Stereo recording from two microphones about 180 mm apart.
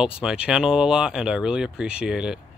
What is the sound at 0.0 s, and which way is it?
Speech, 5° right (ahead or behind).